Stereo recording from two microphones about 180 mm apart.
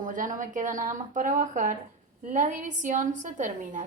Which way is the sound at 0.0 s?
45° right (ahead or behind).